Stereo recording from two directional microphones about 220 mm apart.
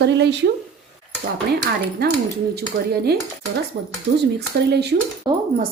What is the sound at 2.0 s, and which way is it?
Speech, 45° right (ahead or behind).